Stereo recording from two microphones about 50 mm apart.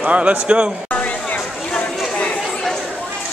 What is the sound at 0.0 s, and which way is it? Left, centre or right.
Speech, right.